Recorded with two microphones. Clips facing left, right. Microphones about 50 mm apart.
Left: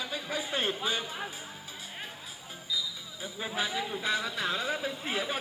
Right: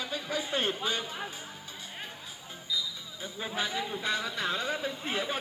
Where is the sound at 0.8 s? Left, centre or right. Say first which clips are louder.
Even; centre.